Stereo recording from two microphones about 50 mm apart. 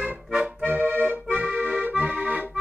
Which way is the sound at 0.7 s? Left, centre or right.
Right.